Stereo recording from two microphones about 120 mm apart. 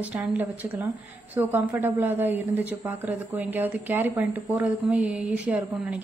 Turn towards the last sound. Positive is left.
turn(degrees=-10)  # may be behind; listen again after turning